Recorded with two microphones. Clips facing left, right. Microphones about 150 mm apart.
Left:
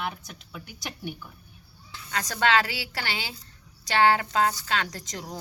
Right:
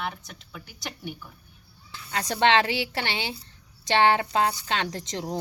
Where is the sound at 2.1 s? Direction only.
25° right (ahead or behind).